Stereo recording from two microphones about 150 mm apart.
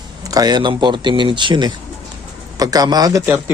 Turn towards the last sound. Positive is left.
turn(degrees=-25)  # may be behind; listen again after turning